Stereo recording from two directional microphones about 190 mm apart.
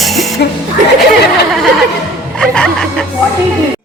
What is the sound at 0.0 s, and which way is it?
Music, centre (ahead or behind).